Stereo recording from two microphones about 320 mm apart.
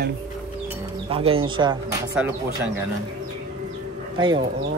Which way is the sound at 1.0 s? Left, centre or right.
Centre.